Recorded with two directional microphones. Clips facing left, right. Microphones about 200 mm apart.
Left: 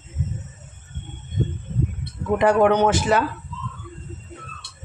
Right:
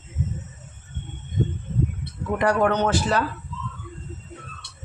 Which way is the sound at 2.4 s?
15° left (ahead or behind).